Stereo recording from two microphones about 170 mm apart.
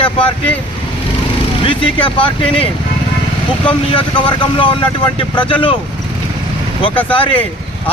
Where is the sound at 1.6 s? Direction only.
30° left (ahead or behind).